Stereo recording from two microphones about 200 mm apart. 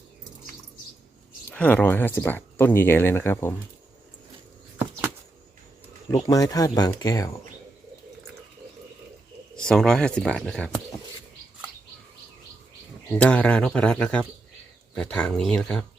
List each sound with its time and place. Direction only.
1.5 s speech: 10° left (ahead or behind)
6.1 s speech: 20° left (ahead or behind)
9.6 s speech: 5° left (ahead or behind)
13.1 s speech: 5° left (ahead or behind)